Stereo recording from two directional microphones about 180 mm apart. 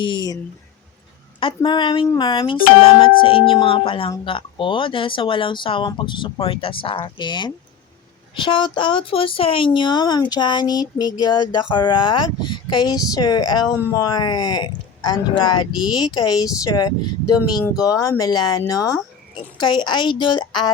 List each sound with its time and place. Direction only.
0.0 s speech: 25° left (ahead or behind)
1.4 s speech: 25° left (ahead or behind)